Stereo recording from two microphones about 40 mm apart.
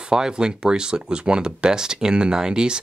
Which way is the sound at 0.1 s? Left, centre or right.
Centre.